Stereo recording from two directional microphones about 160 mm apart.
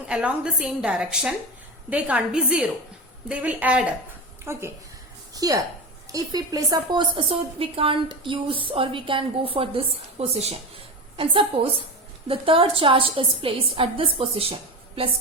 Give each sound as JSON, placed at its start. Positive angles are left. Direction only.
{"t": 0.1, "sound": "a woman's voice", "side_deg": -5}
{"t": 5.3, "sound": "a sound", "side_deg": -20}
{"t": 6.1, "sound": "a woman's voice", "side_deg": -20}